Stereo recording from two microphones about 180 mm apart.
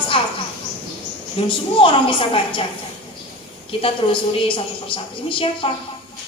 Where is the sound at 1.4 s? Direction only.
30° left (ahead or behind).